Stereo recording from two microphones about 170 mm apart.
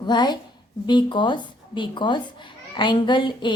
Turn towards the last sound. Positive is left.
turn(degrees=25)  # may be behind; listen again after turning